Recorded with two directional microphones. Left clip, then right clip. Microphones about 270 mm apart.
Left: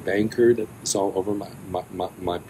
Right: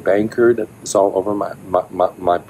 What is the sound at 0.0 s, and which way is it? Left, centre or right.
Speech, centre.